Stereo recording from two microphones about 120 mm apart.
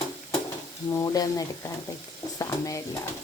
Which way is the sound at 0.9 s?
25° left (ahead or behind).